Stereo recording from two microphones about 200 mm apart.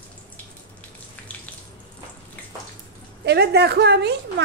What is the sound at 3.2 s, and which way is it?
Speech, 55° right (ahead or behind).